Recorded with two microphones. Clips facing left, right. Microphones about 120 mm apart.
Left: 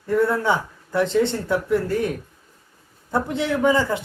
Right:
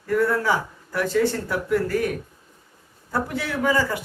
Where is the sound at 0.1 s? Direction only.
25° left (ahead or behind).